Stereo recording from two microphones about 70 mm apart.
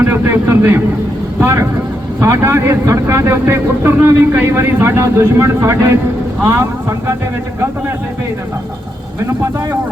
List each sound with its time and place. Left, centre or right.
0.0 s vehicle: right
1.4 s a man's voice: right